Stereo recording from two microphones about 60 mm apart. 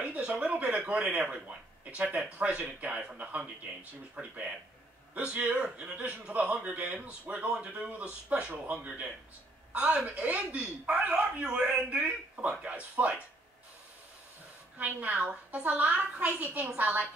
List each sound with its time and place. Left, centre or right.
0.0 s speech: right
5.6 s a man's voice: centre
14.8 s speech: right